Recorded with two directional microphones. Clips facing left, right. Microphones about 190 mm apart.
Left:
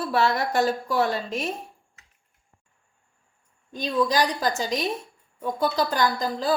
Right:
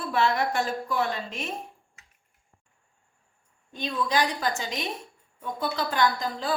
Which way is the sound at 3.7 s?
40° left (ahead or behind).